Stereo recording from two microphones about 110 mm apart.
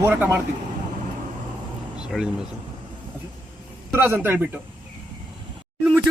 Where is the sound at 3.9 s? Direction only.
15° right (ahead or behind).